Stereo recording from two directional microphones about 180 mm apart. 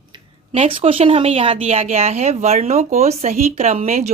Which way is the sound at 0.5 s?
30° right (ahead or behind).